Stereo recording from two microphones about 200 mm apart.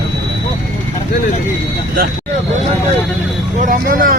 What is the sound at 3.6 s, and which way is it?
Speech, 45° right (ahead or behind).